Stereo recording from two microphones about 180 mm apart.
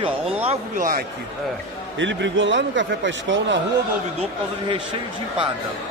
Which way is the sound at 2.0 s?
90° right.